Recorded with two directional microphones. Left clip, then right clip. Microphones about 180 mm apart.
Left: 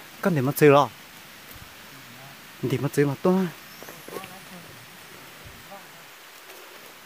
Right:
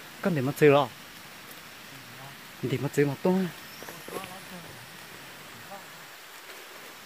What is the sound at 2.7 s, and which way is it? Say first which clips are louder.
Speech: left 3 dB; 35° left (ahead or behind).